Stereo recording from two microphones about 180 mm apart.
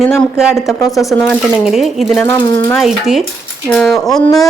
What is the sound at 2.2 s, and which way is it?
Speech, 15° left (ahead or behind).